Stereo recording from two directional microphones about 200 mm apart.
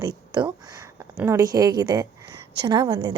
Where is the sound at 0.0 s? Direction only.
20° right (ahead or behind).